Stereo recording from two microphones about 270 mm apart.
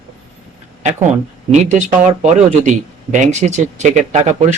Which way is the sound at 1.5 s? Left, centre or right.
Right.